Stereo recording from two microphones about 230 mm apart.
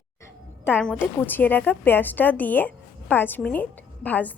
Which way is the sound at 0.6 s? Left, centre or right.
Centre.